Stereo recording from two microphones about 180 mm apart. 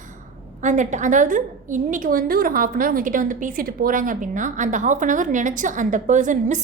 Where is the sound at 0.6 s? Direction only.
40° right (ahead or behind).